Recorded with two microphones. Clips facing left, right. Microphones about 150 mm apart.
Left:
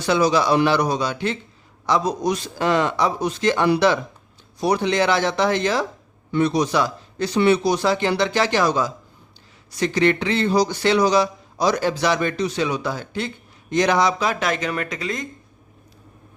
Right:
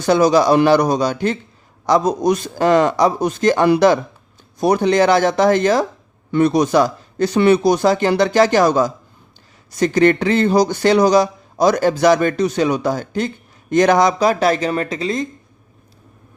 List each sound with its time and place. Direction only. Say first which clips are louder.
0.0 s speech: right 5 dB; 45° right (ahead or behind); by 15.3 s 30° right (ahead or behind)